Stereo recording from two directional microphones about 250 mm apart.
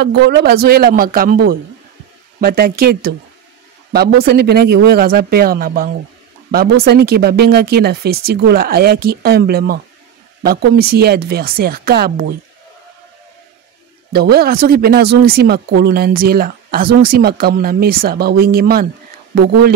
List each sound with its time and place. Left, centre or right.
0.0 s speech: right
14.1 s speech: right